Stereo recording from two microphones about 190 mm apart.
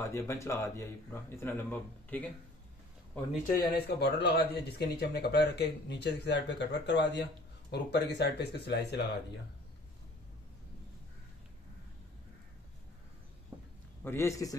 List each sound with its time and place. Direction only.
0.0 s speech: 15° left (ahead or behind)
3.7 s speech: 60° left (ahead or behind)
14.0 s speech: 15° left (ahead or behind)